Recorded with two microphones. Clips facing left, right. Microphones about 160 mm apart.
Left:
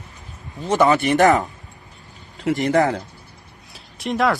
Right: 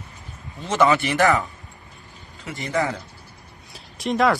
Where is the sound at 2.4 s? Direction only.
85° left.